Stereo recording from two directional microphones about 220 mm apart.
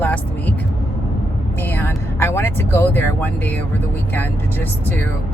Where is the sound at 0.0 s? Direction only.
5° left (ahead or behind).